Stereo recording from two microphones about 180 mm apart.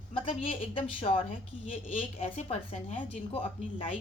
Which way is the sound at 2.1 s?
35° left (ahead or behind).